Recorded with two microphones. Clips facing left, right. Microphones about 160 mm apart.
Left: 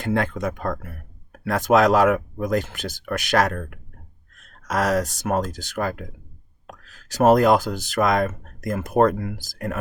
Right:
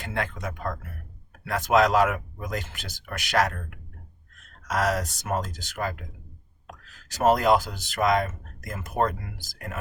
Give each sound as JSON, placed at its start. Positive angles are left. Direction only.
{"t": 0.0, "sound": "speech", "side_deg": 45}
{"t": 1.5, "sound": "speech", "side_deg": 40}
{"t": 4.7, "sound": "speech", "side_deg": 40}
{"t": 7.1, "sound": "speech", "side_deg": 45}